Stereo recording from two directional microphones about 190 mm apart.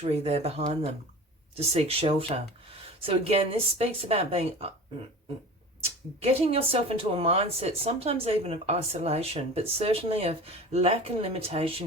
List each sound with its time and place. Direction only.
0.0 s speech: 35° right (ahead or behind)
6.2 s speech: 30° right (ahead or behind)